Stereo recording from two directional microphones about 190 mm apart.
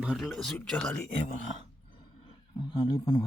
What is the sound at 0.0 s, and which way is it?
Speech, 5° right (ahead or behind).